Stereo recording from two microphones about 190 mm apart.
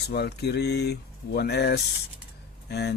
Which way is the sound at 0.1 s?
60° left (ahead or behind).